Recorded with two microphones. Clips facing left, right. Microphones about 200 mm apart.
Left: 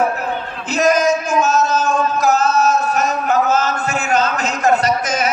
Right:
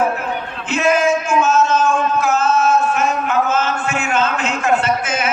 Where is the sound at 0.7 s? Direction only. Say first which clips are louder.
Left 1 dB; 40° left (ahead or behind).